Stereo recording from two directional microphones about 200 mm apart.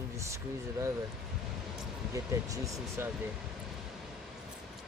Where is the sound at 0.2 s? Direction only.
15° right (ahead or behind).